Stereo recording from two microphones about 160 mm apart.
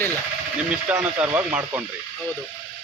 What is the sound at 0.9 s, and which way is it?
Speech, 10° right (ahead or behind).